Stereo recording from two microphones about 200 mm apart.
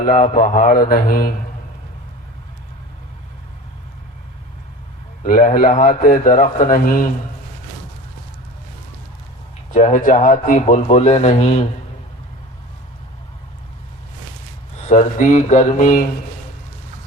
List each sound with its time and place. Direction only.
0.0 s speech: 40° left (ahead or behind)
5.2 s speech: 40° left (ahead or behind)
9.7 s speech: 40° left (ahead or behind)
14.8 s speech: 35° left (ahead or behind)